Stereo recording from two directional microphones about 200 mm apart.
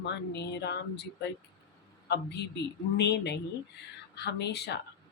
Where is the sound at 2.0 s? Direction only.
55° left (ahead or behind).